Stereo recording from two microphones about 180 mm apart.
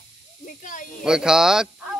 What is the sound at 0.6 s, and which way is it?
Snake, 45° left (ahead or behind).